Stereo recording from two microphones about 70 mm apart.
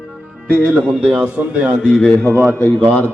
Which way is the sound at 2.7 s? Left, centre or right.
Right.